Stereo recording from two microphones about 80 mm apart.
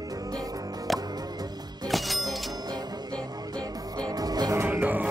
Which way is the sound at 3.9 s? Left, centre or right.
Right.